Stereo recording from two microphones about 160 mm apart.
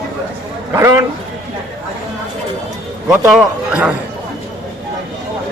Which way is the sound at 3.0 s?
5° right (ahead or behind).